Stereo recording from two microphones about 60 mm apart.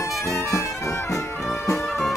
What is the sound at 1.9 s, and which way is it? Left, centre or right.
Music, centre.